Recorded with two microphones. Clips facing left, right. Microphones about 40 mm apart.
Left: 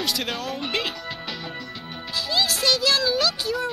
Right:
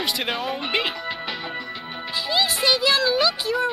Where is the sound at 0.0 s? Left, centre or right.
Centre.